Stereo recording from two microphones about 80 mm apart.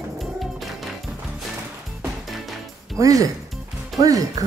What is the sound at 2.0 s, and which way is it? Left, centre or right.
Music, centre.